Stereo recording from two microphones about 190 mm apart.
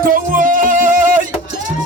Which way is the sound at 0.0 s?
45° right (ahead or behind).